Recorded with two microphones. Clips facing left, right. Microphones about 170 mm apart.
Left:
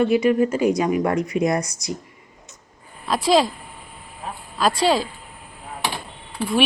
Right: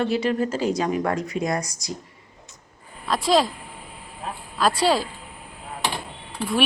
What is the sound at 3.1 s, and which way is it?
Speech, centre (ahead or behind).